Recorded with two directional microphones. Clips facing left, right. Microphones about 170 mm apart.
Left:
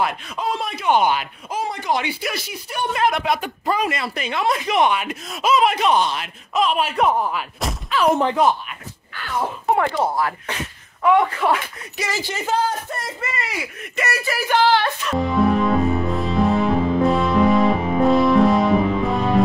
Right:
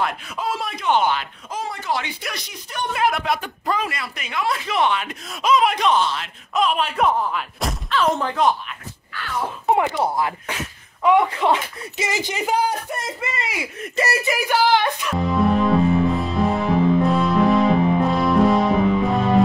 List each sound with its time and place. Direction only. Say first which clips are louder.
0.0 s speech: left 2 dB; centre (ahead or behind)
0.8 s speech: left 2 dB; 10° left (ahead or behind)
2.2 s speech: left 5 dB; 5° left (ahead or behind)
3.3 s speech: left 2 dB; 10° left (ahead or behind)
3.9 s speech: left 4 dB; 30° left (ahead or behind)
4.6 s speech: left 2 dB; 15° left (ahead or behind)
6.5 s speech: left 1 dB; centre (ahead or behind)
7.3 s a sound: even; centre (ahead or behind)
8.1 s speech: left 4 dB; 20° left (ahead or behind)
9.7 s speech: right 1 dB; 15° right (ahead or behind)
13.9 s speech: right 2 dB; 30° right (ahead or behind)
14.2 s speech: left 3 dB; 15° right (ahead or behind)
15.1 s music: left 1 dB; centre (ahead or behind)